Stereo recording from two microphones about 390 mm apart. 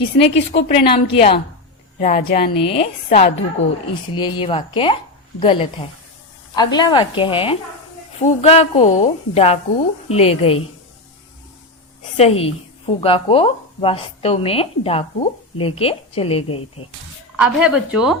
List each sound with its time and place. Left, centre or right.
0.2 s a woman's voice: centre
3.6 s speech: left
4.1 s a woman's voice: centre
12.1 s a woman's voice: centre
17.4 s speech: centre